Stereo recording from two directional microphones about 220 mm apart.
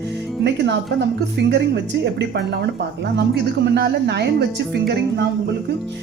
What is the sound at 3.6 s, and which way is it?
Speech, 50° right (ahead or behind).